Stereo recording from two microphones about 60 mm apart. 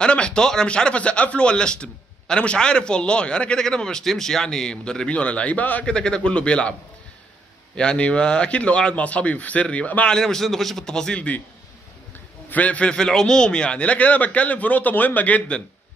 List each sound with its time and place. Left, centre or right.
0.0 s speech: centre
5.9 s speech: centre
7.7 s a man's voice: centre
10.1 s speech: centre
12.4 s a man's voice: left